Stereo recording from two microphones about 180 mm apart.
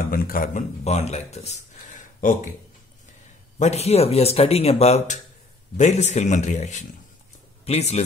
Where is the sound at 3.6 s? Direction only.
35° left (ahead or behind).